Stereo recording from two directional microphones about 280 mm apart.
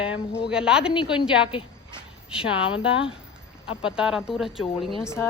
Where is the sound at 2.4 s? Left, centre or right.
Centre.